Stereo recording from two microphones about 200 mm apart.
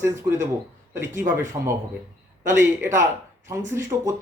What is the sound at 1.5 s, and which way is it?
Speech, 30° right (ahead or behind).